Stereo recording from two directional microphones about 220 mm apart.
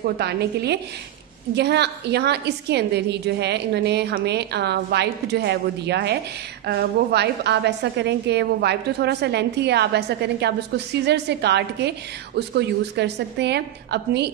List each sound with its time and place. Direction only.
0.0 s a woman's voice: 45° right (ahead or behind)